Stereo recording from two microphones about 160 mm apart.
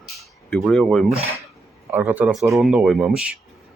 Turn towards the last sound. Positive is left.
turn(degrees=-5)  # may be behind; listen again after turning